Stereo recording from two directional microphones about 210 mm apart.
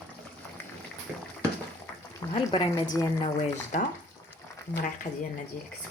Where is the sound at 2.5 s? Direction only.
25° left (ahead or behind).